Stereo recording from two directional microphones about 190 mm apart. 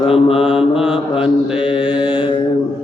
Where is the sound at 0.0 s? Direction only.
30° left (ahead or behind).